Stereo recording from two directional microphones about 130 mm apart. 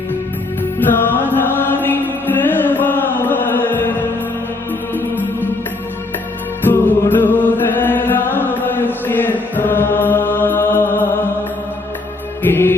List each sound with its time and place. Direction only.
0.8 s music: 15° left (ahead or behind)
6.7 s music: 15° left (ahead or behind)
12.4 s mantra: 15° left (ahead or behind)